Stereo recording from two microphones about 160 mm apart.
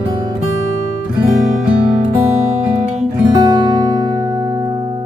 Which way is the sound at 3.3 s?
25° right (ahead or behind).